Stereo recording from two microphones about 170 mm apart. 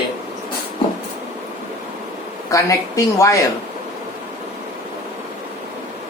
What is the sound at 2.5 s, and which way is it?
Speech, 20° left (ahead or behind).